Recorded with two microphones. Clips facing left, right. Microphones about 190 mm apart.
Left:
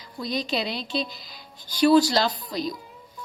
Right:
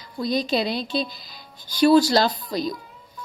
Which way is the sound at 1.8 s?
40° right (ahead or behind).